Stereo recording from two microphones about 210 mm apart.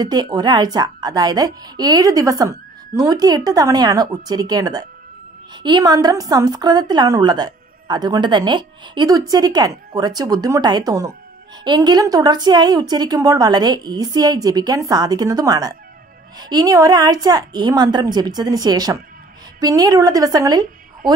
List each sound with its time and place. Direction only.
0.0 s a woman's voice: 20° right (ahead or behind)